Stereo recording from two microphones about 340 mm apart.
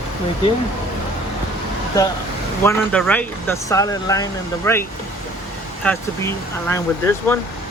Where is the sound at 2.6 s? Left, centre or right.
Centre.